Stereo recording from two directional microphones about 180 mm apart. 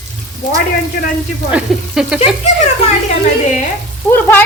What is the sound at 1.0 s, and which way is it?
Speech, 55° left (ahead or behind).